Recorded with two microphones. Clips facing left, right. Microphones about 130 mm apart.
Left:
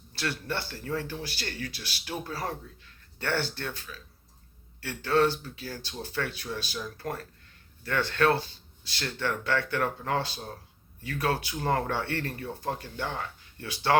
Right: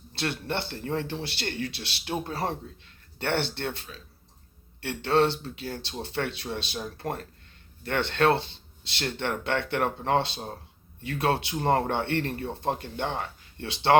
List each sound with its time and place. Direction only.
0.1 s speech: 25° right (ahead or behind)